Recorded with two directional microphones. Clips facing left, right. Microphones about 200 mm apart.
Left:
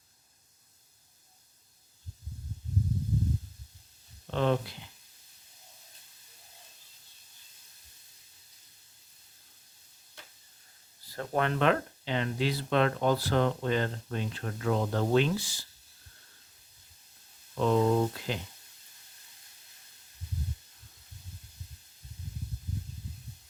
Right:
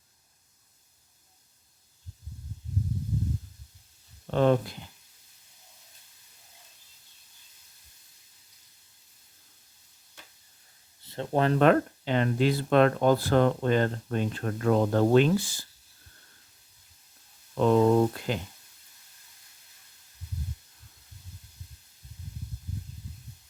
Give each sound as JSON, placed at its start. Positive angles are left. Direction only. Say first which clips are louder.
{"t": 4.3, "sound": "speech", "louder": "right 5 dB", "side_deg": -45}
{"t": 11.0, "sound": "speech", "louder": "right 4 dB", "side_deg": -25}
{"t": 17.5, "sound": "speech", "louder": "right 4 dB", "side_deg": -55}